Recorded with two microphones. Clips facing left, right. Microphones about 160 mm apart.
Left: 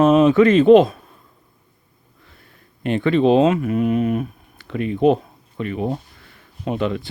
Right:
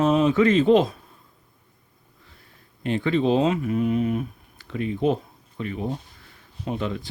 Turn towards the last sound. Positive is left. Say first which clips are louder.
# left 6 dB
turn(degrees=75)  # may be behind; listen again after turning